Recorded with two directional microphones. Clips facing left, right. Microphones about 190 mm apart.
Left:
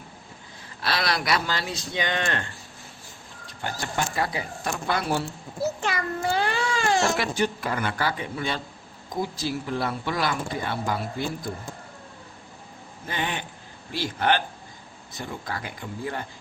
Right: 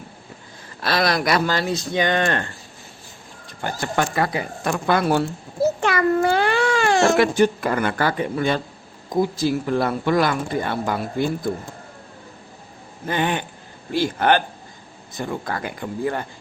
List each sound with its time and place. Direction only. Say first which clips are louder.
0.8 s speech: right 6 dB; 45° right (ahead or behind)
3.6 s speech: right 6 dB; 55° right (ahead or behind)
13.1 s speech: right 8 dB; 50° right (ahead or behind)